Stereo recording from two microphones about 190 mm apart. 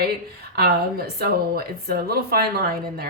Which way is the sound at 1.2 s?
55° right (ahead or behind).